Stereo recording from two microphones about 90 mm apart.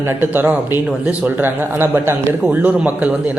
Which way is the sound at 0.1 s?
25° right (ahead or behind).